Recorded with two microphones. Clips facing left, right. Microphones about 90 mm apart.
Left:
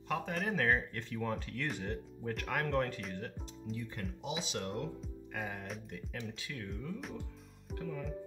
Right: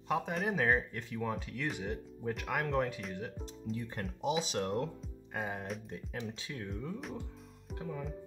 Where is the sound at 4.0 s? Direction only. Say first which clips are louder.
Right 9 dB; 40° right (ahead or behind).